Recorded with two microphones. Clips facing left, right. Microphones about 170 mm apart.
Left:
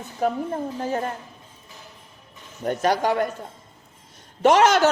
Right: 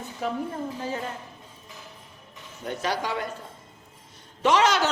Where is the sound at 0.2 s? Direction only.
45° left (ahead or behind).